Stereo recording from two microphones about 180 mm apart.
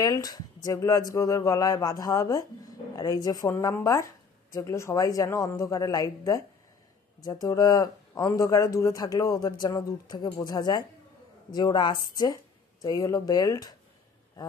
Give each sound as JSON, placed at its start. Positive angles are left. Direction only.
{"t": 0.0, "sound": "speech", "side_deg": 20}